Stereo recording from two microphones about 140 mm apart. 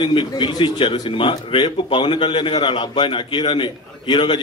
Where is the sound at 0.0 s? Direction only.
35° left (ahead or behind).